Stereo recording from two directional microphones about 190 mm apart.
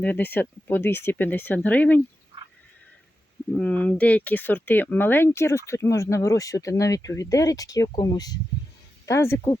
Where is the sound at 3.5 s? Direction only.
10° left (ahead or behind).